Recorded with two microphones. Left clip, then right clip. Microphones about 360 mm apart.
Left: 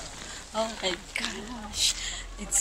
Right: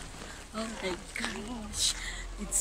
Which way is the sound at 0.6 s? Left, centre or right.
Centre.